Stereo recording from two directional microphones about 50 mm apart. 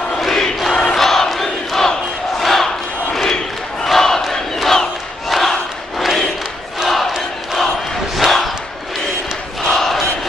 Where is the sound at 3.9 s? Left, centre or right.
Centre.